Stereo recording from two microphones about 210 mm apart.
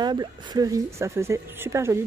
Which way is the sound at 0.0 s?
20° right (ahead or behind).